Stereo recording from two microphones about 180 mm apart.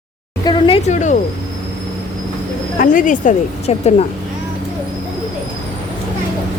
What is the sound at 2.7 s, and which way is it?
Speech, 45° left (ahead or behind).